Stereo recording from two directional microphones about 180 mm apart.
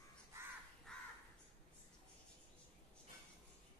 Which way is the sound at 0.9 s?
5° left (ahead or behind).